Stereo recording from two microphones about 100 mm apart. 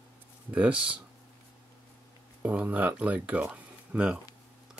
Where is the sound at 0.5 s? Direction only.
10° right (ahead or behind).